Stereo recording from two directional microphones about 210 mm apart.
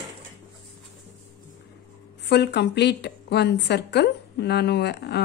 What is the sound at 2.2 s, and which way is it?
A woman's voice, 50° left (ahead or behind).